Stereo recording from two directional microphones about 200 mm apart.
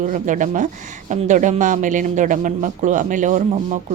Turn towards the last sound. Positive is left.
turn(degrees=-40)  # may be behind; listen again after turning